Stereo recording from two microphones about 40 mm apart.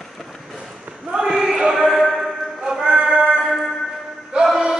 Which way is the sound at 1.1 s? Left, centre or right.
Centre.